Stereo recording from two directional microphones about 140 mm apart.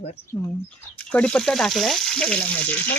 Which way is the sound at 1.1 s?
5° left (ahead or behind).